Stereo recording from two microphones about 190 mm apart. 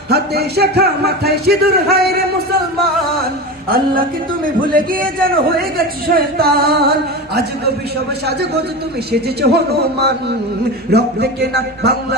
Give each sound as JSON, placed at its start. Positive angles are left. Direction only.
{"t": 0.1, "sound": "speech", "side_deg": -55}
{"t": 3.6, "sound": "a man's voice", "side_deg": -50}
{"t": 9.1, "sound": "speech", "side_deg": -60}